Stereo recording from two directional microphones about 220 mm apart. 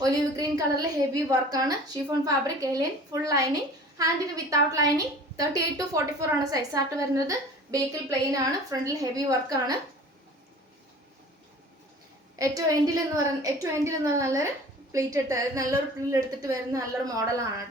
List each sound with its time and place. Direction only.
0.0 s a woman's voice: 15° right (ahead or behind)
12.4 s a woman's voice: 15° right (ahead or behind)